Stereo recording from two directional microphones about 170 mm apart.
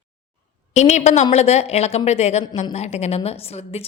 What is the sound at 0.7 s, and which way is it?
A woman's voice, 40° left (ahead or behind).